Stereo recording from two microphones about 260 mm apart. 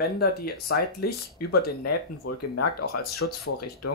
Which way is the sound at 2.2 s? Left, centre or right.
Left.